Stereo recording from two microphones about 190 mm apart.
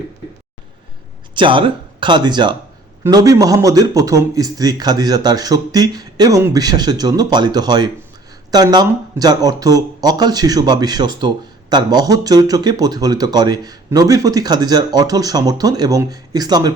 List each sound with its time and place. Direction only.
1.4 s speech: 25° right (ahead or behind)